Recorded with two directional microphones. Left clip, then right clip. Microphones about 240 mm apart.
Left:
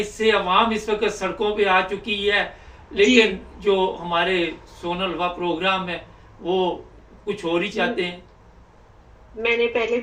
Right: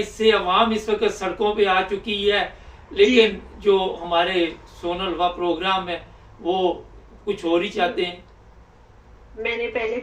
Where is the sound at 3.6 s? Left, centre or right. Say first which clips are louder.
Right 1 dB; centre.